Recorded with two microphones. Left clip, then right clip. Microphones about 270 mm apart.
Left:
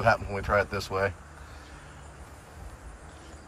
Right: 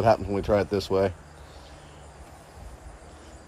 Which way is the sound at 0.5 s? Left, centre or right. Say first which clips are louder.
Even; centre.